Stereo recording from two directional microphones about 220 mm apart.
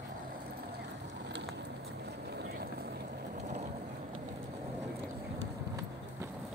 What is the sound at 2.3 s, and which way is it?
Vehicle, 45° right (ahead or behind).